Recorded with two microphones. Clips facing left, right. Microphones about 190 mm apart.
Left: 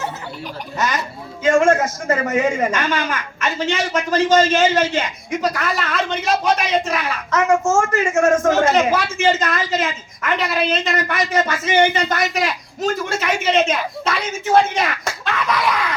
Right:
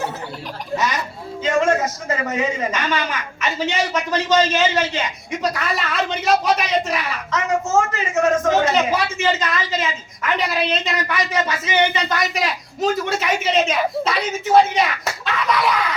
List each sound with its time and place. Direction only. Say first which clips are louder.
1.5 s a man's voice: left 4 dB; 50° left (ahead or behind)
5.3 s a man's voice: left 3 dB; centre (ahead or behind)
6.8 s a man's voice: left 1 dB; 50° left (ahead or behind)
10.2 s a man's voice: left 1 dB; centre (ahead or behind)
10.8 s a man's voice: left 2 dB; 50° left (ahead or behind)
12.3 s a man's voice: left 2 dB; centre (ahead or behind)